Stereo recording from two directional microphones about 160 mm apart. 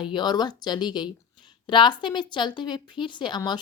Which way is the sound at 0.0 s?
30° left (ahead or behind).